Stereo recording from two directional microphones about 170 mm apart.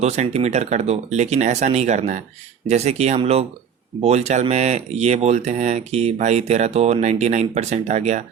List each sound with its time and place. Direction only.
0.0 s speech: 40° right (ahead or behind)